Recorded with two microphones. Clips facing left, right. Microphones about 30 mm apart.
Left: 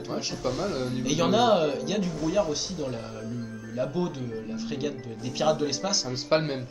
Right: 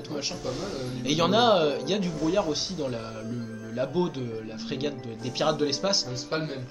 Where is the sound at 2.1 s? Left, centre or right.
Centre.